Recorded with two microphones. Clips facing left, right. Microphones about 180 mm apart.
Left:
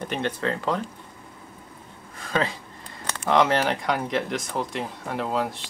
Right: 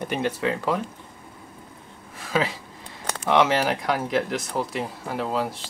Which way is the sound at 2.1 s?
5° right (ahead or behind).